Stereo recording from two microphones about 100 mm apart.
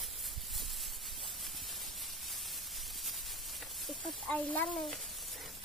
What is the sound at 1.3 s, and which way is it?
Spray, centre (ahead or behind).